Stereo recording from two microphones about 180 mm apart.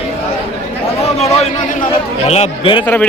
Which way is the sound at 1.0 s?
35° left (ahead or behind).